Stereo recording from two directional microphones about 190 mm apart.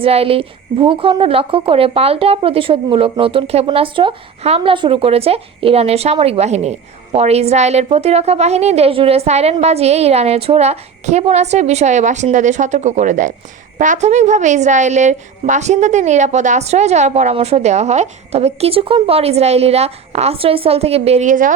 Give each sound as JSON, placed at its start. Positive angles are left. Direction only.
{"t": 0.0, "sound": "speech", "side_deg": -30}